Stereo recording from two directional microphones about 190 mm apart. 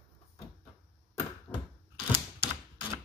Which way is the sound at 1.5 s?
15° left (ahead or behind).